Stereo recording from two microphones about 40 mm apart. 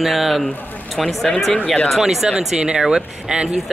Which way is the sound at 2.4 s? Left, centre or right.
Right.